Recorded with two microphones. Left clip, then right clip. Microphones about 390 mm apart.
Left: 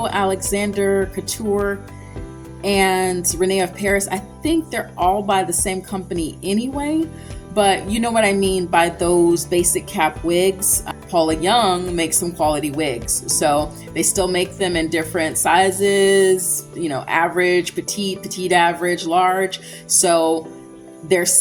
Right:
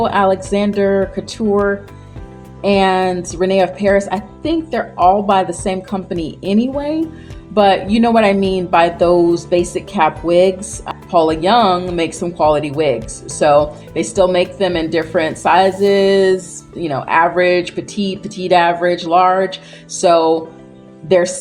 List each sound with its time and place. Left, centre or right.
0.0 s speech: left
2.6 s speech: left